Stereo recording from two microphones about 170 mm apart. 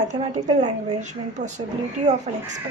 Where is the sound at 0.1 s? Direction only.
45° right (ahead or behind).